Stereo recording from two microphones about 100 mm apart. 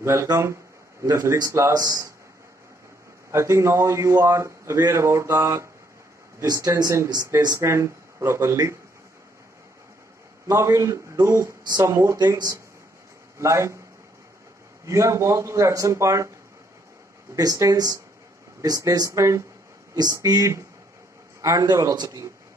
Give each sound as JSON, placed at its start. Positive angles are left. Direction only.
{"t": 0.0, "sound": "a man's voice", "side_deg": -30}
{"t": 3.3, "sound": "a man's voice", "side_deg": -30}
{"t": 10.5, "sound": "a man's voice", "side_deg": -30}
{"t": 14.9, "sound": "speech", "side_deg": -30}
{"t": 17.4, "sound": "speech", "side_deg": -35}